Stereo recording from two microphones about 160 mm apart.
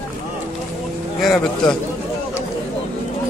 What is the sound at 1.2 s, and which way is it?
Speech, centre (ahead or behind).